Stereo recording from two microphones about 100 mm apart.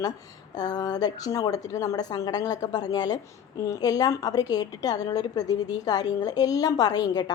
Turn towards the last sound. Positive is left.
turn(degrees=40)  # may be behind; listen again after turning